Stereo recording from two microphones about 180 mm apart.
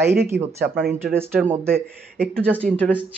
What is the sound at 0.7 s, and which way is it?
Speech, 5° left (ahead or behind).